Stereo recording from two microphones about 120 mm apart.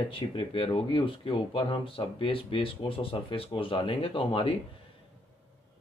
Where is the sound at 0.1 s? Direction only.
50° left (ahead or behind).